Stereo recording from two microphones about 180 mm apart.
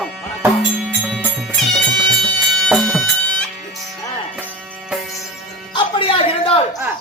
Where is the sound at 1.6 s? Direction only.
Centre (ahead or behind).